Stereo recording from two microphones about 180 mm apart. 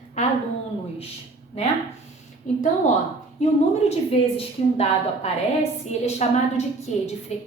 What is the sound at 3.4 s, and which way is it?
Speech, 40° left (ahead or behind).